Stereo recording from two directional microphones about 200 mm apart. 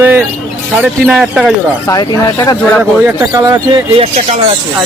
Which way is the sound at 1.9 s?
20° left (ahead or behind).